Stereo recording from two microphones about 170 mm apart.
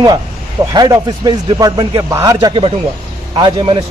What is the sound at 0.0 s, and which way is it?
A man's voice, 20° right (ahead or behind).